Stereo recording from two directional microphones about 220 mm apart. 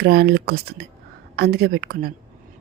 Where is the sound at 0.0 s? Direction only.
45° right (ahead or behind).